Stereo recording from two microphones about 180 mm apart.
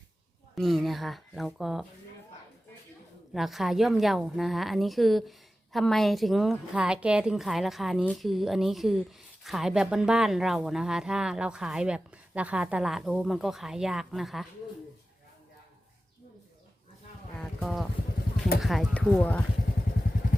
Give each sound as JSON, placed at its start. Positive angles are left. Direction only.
{"t": 0.5, "sound": "a woman's voice", "side_deg": 0}
{"t": 3.3, "sound": "a woman's voice", "side_deg": 0}
{"t": 17.3, "sound": "a sound", "side_deg": 5}
{"t": 18.6, "sound": "speech", "side_deg": 0}
{"t": 20.2, "sound": "vehicle", "side_deg": 50}